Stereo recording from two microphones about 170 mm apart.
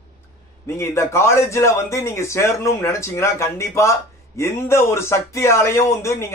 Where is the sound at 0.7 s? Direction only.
15° left (ahead or behind).